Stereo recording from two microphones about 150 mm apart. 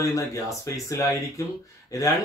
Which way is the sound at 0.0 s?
20° left (ahead or behind).